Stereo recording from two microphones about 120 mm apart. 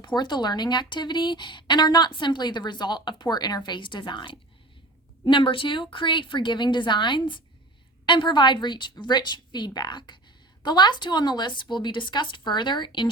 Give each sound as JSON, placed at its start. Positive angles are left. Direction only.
{"t": 0.0, "sound": "speech", "side_deg": 40}